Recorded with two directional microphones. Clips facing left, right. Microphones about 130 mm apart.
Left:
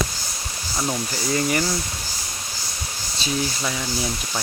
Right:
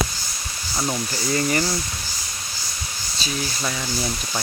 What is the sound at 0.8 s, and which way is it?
Speech, centre (ahead or behind).